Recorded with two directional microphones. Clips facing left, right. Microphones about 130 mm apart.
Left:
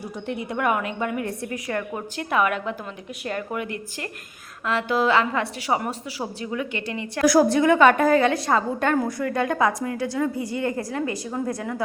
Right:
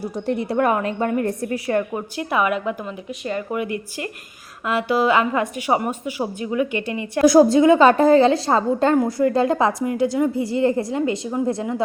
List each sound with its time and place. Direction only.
0.3 s a woman's voice: 35° right (ahead or behind)
1.5 s a woman's voice: 30° right (ahead or behind)
2.1 s a woman's voice: 5° right (ahead or behind); by 11.8 s 20° right (ahead or behind)